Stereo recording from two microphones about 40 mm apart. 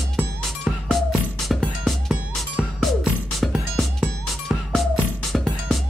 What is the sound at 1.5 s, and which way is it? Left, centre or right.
Music, centre.